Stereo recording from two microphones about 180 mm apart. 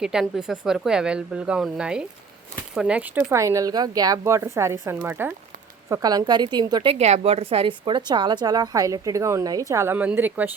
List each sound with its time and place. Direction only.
0.0 s a woman's voice: 5° right (ahead or behind)
3.4 s a woman's voice: 20° right (ahead or behind)
7.0 s a woman's voice: 35° right (ahead or behind); by 10.5 s 10° right (ahead or behind)